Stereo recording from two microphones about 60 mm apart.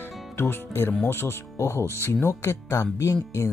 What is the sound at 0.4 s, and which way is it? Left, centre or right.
Speech, left.